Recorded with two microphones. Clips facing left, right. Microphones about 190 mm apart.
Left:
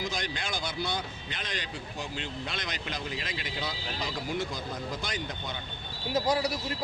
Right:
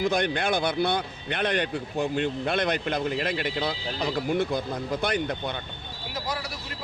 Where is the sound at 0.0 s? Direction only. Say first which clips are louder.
Right 10 dB; 60° right (ahead or behind).